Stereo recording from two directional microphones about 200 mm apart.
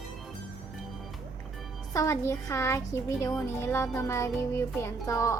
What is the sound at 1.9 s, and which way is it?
Music, 15° left (ahead or behind).